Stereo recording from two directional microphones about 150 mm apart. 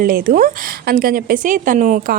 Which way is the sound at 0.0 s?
70° right (ahead or behind).